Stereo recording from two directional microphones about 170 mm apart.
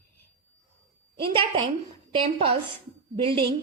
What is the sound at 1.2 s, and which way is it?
A woman's voice, 30° right (ahead or behind).